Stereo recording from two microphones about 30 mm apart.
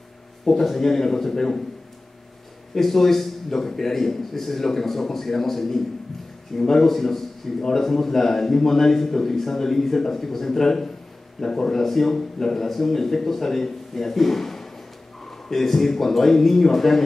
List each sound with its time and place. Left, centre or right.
0.5 s a man's voice: centre
2.7 s a man's voice: centre
11.8 s a man's voice: centre